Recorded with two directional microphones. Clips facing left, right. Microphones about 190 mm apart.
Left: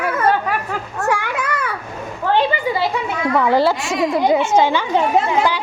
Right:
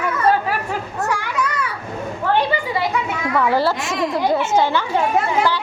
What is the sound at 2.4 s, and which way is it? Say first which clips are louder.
A woman's voice: left 4 dB; 25° left (ahead or behind).